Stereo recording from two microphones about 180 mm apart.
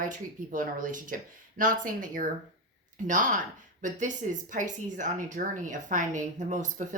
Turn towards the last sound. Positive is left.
turn(degrees=-45)  # may be behind; listen again after turning